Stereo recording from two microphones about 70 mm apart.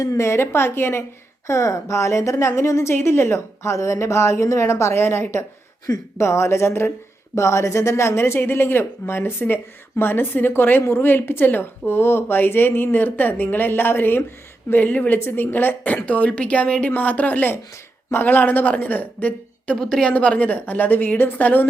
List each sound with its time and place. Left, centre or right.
0.0 s a woman's voice: left
1.5 s a woman's voice: left
19.7 s a woman's voice: centre